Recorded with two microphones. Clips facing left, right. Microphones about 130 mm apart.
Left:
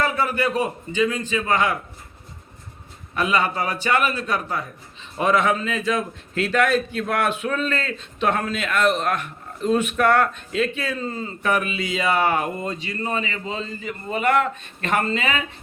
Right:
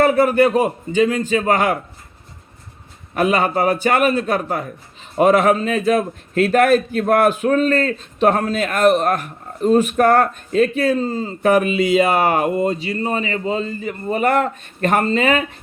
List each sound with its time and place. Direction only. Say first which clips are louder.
0.2 s a man's voice: right 8 dB; 45° right (ahead or behind)
3.2 s a man's voice: right 5 dB; 45° right (ahead or behind)